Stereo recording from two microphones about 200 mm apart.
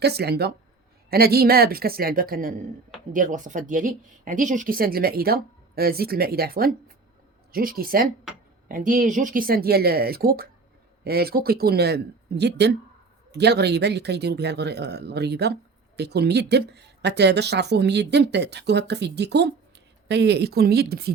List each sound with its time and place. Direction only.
0.0 s speech: 55° right (ahead or behind)